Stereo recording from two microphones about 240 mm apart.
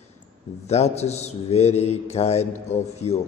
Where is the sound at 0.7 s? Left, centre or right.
Left.